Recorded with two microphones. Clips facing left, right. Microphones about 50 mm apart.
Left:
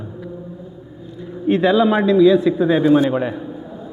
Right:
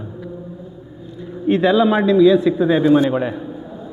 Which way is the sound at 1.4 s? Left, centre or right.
Centre.